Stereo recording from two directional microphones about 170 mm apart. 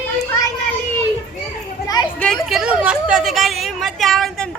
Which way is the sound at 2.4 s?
5° right (ahead or behind).